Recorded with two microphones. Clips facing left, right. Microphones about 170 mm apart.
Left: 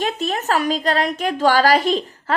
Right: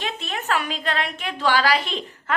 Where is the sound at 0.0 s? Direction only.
40° left (ahead or behind).